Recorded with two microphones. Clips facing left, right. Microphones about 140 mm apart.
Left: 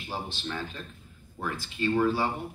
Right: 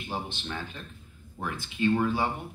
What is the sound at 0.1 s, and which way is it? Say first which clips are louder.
Speech: left 1 dB; 15° right (ahead or behind).